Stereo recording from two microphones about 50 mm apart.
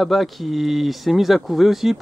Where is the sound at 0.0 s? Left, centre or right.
Centre.